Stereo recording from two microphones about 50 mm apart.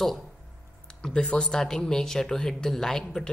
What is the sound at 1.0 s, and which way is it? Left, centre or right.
A woman's voice, left.